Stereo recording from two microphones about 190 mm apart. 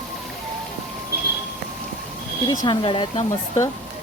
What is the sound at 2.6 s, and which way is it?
Speech, 25° left (ahead or behind).